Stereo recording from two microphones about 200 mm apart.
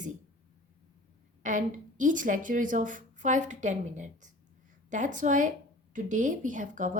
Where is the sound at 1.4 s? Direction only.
40° right (ahead or behind).